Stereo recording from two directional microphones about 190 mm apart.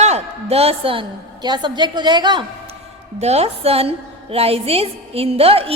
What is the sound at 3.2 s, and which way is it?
A woman's voice, 35° right (ahead or behind).